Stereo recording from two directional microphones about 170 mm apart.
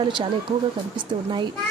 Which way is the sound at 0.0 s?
30° right (ahead or behind).